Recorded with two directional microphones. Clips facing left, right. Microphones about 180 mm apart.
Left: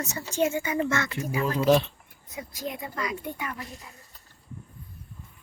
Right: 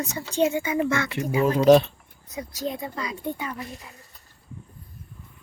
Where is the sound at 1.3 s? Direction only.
25° right (ahead or behind).